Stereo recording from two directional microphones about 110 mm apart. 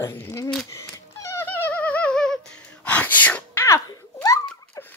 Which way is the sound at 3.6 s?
25° left (ahead or behind).